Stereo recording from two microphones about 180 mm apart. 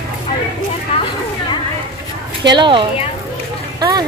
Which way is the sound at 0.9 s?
30° left (ahead or behind).